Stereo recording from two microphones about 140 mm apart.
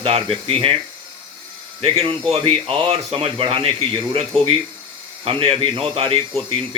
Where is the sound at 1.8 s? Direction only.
45° right (ahead or behind).